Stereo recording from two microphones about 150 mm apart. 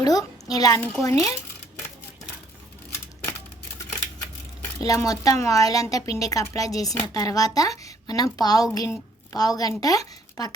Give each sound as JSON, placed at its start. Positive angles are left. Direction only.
{"t": 0.0, "sound": "a sound", "side_deg": 25}
{"t": 0.8, "sound": "speech", "side_deg": 10}
{"t": 4.8, "sound": "a woman's voice", "side_deg": 25}